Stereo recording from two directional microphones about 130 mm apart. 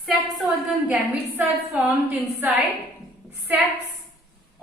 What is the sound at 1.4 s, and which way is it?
A woman's voice, 15° right (ahead or behind).